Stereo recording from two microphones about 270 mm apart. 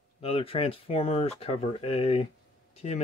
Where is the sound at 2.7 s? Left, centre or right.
Left.